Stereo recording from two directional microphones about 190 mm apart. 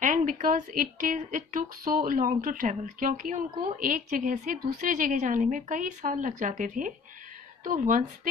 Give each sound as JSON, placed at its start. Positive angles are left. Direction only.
{"t": 0.0, "sound": "a woman's voice", "side_deg": -45}